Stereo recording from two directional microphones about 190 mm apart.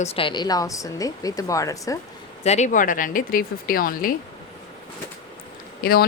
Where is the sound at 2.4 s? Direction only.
35° left (ahead or behind).